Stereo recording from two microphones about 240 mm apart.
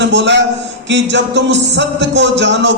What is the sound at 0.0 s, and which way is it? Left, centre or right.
Speech, right.